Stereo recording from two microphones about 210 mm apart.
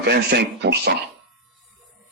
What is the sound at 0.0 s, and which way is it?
Speech, 50° right (ahead or behind).